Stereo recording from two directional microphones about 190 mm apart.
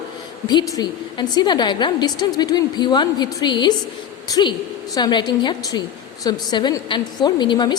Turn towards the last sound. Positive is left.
turn(degrees=25)  # may be behind; listen again after turning